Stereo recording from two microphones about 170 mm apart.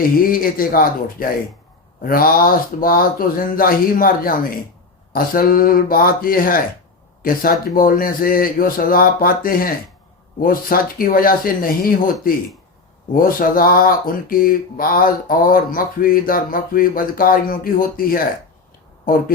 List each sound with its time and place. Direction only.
0.3 s speech: 55° left (ahead or behind)